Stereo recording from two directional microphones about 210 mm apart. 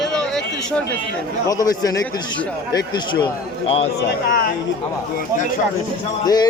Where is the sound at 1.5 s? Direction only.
15° left (ahead or behind).